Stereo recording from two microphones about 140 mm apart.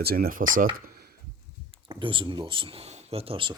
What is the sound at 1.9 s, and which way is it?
Speech, 35° right (ahead or behind).